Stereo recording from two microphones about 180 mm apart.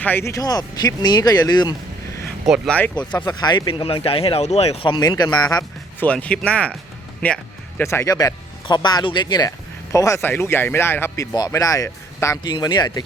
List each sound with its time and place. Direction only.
0.0 s speech: 10° left (ahead or behind)
2.5 s speech: 5° left (ahead or behind)
3.2 s speech: 20° left (ahead or behind)
6.1 s speech: 5° left (ahead or behind); by 13.0 s 25° left (ahead or behind)